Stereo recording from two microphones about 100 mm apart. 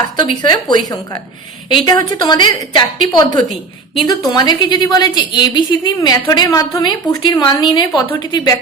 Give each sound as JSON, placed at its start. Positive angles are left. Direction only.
{"t": 0.2, "sound": "a woman's voice", "side_deg": 50}